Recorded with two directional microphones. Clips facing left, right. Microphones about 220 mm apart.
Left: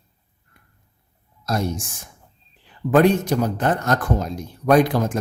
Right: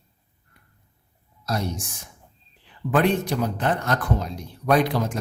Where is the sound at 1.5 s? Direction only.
45° left (ahead or behind).